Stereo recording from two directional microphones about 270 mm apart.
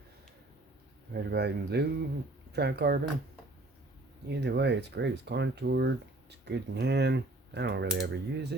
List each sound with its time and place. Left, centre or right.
1.1 s speech: right
4.3 s speech: right